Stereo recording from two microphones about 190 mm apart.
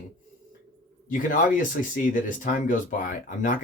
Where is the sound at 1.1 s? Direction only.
45° left (ahead or behind).